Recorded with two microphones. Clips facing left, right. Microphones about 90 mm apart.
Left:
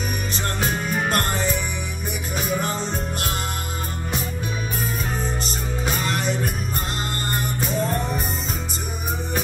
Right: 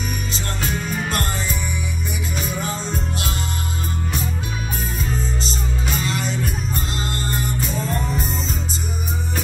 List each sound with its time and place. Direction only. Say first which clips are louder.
0.3 s music: left 3 dB; 50° left (ahead or behind)
2.6 s music: even; 50° left (ahead or behind)
5.4 s music: even; 55° left (ahead or behind)